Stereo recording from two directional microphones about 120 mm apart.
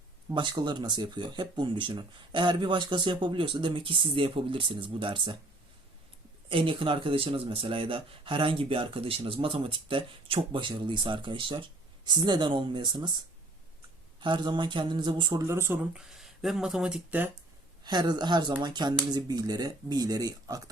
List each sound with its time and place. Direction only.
0.3 s speech: 40° right (ahead or behind)
6.5 s speech: 45° right (ahead or behind)
14.2 s speech: 40° right (ahead or behind); by 15.8 s 20° right (ahead or behind)
15.8 s speech: 5° right (ahead or behind)
17.8 s speech: 35° right (ahead or behind)